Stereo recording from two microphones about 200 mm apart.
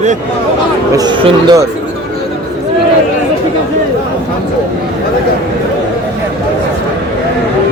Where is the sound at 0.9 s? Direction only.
20° right (ahead or behind).